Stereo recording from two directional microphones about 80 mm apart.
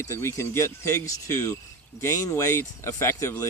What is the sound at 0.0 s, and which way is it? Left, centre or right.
Speech, left.